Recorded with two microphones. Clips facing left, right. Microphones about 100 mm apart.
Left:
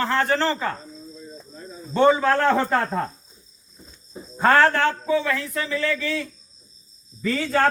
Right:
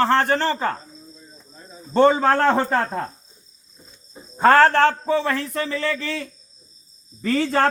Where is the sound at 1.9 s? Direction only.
40° right (ahead or behind).